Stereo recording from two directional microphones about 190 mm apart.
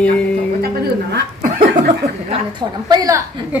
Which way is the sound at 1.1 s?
50° right (ahead or behind).